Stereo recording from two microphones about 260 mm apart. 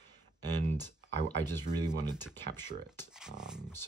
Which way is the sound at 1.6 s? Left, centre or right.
Centre.